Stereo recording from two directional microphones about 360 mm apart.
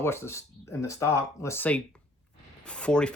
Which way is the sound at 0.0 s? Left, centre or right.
Centre.